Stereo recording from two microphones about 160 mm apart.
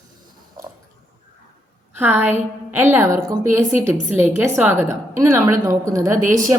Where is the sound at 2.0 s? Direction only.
10° right (ahead or behind).